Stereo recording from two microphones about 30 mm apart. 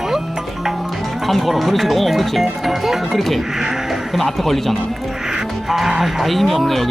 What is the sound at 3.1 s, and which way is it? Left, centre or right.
Speech, centre.